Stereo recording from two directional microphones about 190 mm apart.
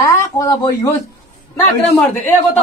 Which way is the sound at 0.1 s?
15° left (ahead or behind).